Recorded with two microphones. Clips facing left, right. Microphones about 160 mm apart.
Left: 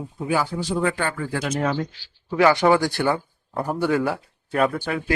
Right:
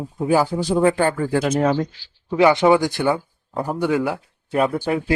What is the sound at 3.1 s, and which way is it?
A man's voice, 10° right (ahead or behind).